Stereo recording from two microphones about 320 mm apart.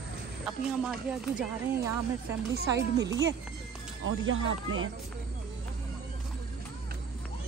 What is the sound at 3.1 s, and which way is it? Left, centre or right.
Speech, right.